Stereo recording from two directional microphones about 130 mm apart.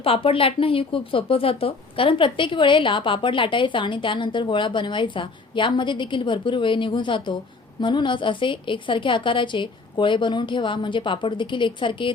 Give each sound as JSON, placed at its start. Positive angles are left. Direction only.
{"t": 0.0, "sound": "speech", "side_deg": 45}